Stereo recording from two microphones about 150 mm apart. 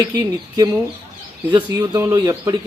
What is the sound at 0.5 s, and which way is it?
Speech, 20° right (ahead or behind).